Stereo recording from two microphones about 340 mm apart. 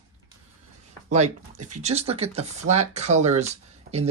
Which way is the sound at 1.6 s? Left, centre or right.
Centre.